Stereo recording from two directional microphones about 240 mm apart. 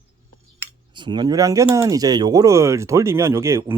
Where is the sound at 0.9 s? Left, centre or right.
Centre.